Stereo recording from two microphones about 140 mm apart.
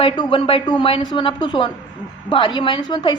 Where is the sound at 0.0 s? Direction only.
40° left (ahead or behind).